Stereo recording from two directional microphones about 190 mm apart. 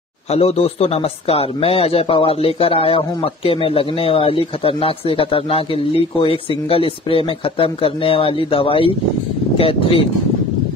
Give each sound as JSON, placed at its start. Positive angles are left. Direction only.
{"t": 0.3, "sound": "speech", "side_deg": 35}